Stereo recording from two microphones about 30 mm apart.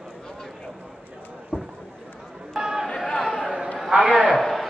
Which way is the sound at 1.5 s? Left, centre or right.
Right.